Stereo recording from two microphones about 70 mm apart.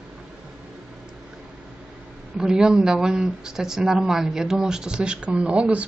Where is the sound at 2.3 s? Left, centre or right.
Centre.